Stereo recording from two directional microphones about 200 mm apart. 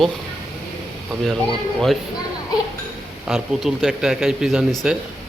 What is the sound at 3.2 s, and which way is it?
Speech, centre (ahead or behind).